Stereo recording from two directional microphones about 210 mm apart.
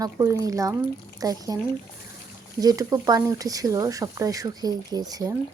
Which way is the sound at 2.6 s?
20° right (ahead or behind).